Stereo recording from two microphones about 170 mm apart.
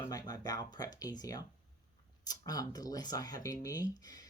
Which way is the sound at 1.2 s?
20° left (ahead or behind).